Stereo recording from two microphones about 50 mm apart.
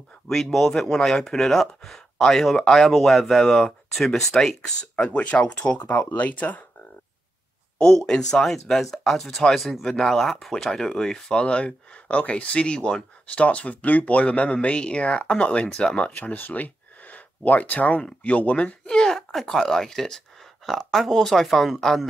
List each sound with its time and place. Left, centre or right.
0.3 s speech: centre
5.1 s speech: left
8.1 s speech: centre
11.3 s speech: left
16.1 s speech: left; by 22.0 s centre